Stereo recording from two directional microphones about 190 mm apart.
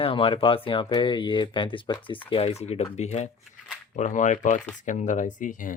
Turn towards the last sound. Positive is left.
turn(degrees=45)  # may be behind; listen again after turning